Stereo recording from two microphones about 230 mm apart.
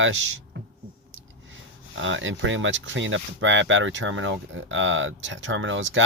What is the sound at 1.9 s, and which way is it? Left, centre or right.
Speech, right.